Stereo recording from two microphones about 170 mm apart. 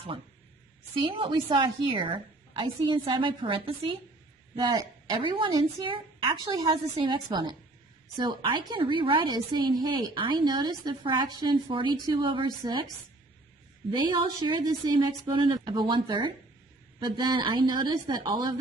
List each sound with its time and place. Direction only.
1.0 s a woman's voice: 30° right (ahead or behind)
13.9 s a woman's voice: 25° right (ahead or behind)